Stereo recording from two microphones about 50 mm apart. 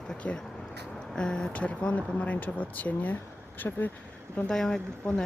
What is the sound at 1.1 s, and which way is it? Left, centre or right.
Speech, centre.